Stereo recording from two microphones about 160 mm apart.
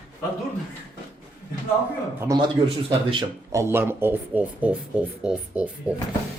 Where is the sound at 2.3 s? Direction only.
20° right (ahead or behind).